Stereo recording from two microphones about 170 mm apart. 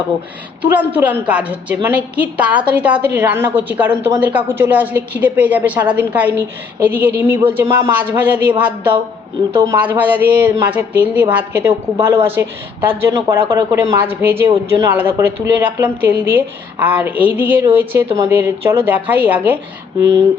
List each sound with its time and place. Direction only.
0.6 s a woman's voice: 10° right (ahead or behind)